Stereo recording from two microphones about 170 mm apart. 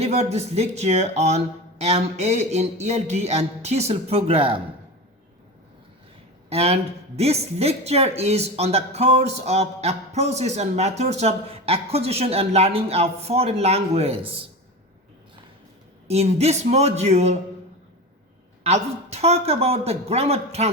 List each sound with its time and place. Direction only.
0.0 s speech: 40° right (ahead or behind)
6.5 s speech: 35° right (ahead or behind)
16.0 s speech: 40° right (ahead or behind)
18.6 s speech: 40° right (ahead or behind)